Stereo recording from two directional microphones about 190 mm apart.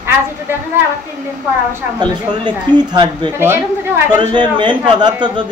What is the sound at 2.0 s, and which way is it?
A man's voice, 25° right (ahead or behind).